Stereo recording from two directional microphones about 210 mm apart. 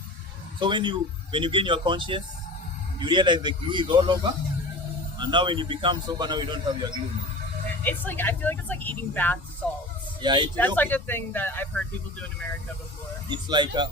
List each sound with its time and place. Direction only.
0.6 s a man's voice: 20° right (ahead or behind)
7.9 s speech: 10° left (ahead or behind)
10.2 s a man's voice: 20° right (ahead or behind)
10.8 s speech: 10° left (ahead or behind)
13.2 s a man's voice: 20° right (ahead or behind)